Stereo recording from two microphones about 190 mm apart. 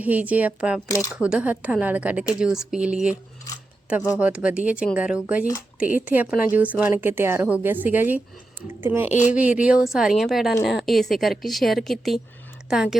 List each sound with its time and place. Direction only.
0.0 s speech: 10° right (ahead or behind)
0.9 s speech: 15° left (ahead or behind)
1.1 s a woman's voice: 5° right (ahead or behind)
4.2 s speech: 5° right (ahead or behind)
9.0 s a woman's voice: 40° left (ahead or behind)
9.3 s a woman's voice: 5° right (ahead or behind)